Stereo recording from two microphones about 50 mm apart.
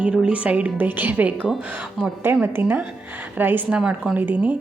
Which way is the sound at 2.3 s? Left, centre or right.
Right.